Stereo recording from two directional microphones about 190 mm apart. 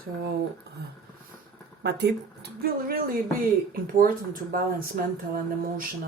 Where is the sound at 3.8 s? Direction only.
50° right (ahead or behind).